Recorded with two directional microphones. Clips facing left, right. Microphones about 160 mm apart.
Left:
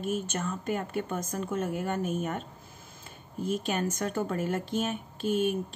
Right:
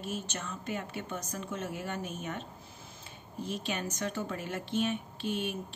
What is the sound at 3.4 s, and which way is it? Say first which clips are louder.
Speech: left 6 dB; 45° left (ahead or behind).